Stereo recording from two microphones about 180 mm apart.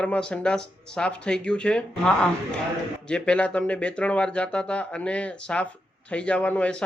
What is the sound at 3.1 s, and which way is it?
Speech, 5° left (ahead or behind).